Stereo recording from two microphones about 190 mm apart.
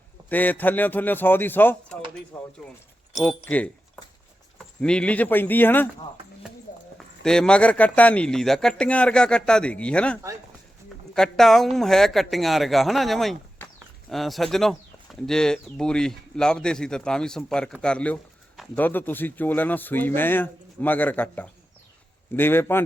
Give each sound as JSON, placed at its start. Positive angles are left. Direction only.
{"t": 0.3, "sound": "speech", "side_deg": 10}
{"t": 6.7, "sound": "clip-clop", "side_deg": 40}
{"t": 7.2, "sound": "speech", "side_deg": 5}